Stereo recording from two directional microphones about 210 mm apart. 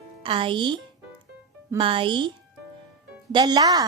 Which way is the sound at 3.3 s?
20° right (ahead or behind).